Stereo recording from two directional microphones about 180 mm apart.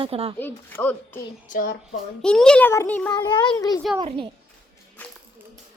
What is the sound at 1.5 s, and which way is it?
Speech, 50° left (ahead or behind).